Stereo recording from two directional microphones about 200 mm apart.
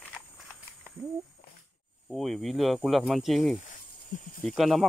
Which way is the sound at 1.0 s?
15° right (ahead or behind).